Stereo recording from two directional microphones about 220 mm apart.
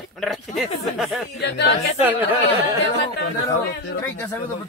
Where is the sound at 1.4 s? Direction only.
50° left (ahead or behind).